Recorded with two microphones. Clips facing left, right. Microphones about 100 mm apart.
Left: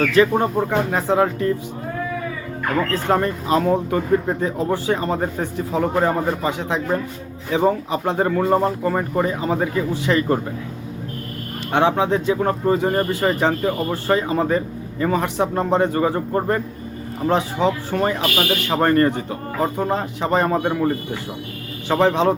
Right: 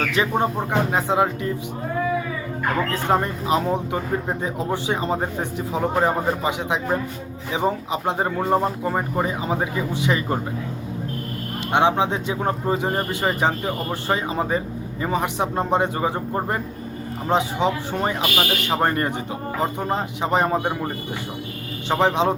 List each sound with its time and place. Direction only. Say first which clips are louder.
0.0 s speech: left 5 dB; 20° right (ahead or behind)
2.9 s speech: left 2 dB; 15° right (ahead or behind)
11.7 s speech: left 2 dB; 20° right (ahead or behind)